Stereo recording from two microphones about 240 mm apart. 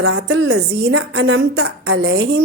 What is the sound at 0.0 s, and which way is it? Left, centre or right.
A woman's voice, right.